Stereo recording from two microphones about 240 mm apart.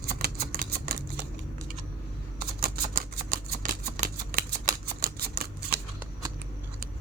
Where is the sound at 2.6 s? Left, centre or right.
Right.